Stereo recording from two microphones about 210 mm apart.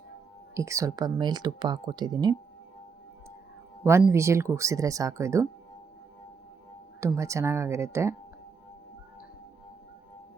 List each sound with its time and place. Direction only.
0.5 s speech: 15° right (ahead or behind)
3.8 s speech: 15° right (ahead or behind)
7.0 s speech: 15° right (ahead or behind)